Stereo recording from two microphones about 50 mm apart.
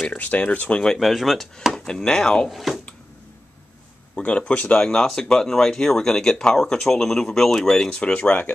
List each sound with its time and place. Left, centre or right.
0.2 s speech: left
0.9 s speech: centre
1.9 s speech: centre
2.5 s speech: centre
4.1 s speech: left
8.0 s speech: left